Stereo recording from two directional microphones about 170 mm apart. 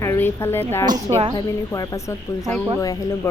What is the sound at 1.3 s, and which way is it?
Speech, 20° left (ahead or behind).